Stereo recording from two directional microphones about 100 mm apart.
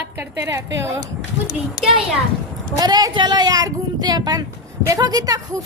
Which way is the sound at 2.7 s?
40° right (ahead or behind).